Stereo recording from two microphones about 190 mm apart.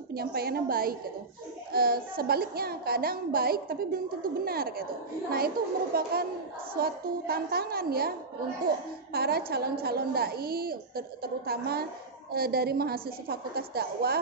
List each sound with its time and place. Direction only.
0.1 s a woman's voice: 55° right (ahead or behind)
5.9 s a woman's voice: 50° right (ahead or behind)